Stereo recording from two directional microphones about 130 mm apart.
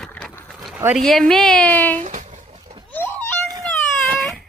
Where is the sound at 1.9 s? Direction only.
70° right (ahead or behind).